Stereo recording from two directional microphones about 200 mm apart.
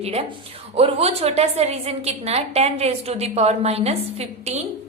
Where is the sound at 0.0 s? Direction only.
30° right (ahead or behind).